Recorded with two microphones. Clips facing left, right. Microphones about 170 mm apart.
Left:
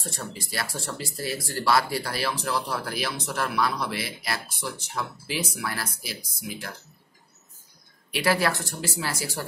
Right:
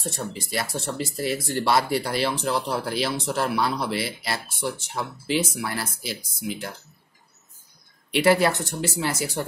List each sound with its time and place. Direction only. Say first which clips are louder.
0.3 s speech: right 4 dB; 20° right (ahead or behind)
8.1 s speech: right 5 dB; 25° right (ahead or behind)